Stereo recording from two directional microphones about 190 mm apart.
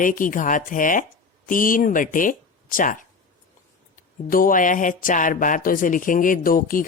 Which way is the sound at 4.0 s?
45° left (ahead or behind).